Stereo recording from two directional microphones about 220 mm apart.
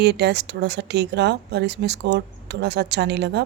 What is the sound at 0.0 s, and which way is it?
A woman's voice, 50° right (ahead or behind).